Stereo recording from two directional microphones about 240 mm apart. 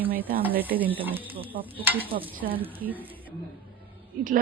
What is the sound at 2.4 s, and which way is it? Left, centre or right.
Speech, right.